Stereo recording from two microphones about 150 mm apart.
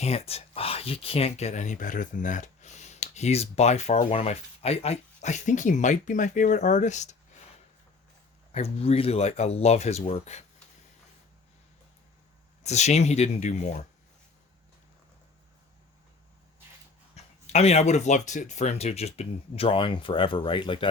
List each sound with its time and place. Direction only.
0.0 s speech: 40° left (ahead or behind)
8.5 s speech: 45° left (ahead or behind)
12.6 s speech: 50° left (ahead or behind)
17.2 s speech: 45° left (ahead or behind)